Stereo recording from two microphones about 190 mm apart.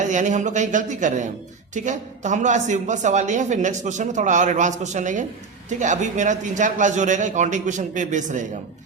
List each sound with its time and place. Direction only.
0.0 s a woman's voice: 40° right (ahead or behind)